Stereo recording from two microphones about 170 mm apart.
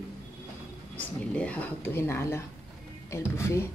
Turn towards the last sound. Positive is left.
turn(degrees=15)  # may be behind; listen again after turning